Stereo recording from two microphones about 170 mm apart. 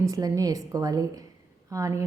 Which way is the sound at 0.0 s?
20° right (ahead or behind).